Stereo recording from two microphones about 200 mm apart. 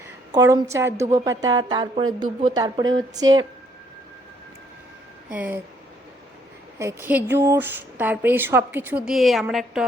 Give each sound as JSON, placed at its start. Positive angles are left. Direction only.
{"t": 0.3, "sound": "speech", "side_deg": -15}
{"t": 5.3, "sound": "speech", "side_deg": -5}
{"t": 6.7, "sound": "speech", "side_deg": -10}